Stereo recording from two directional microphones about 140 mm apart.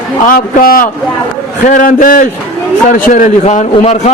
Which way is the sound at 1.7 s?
70° left (ahead or behind).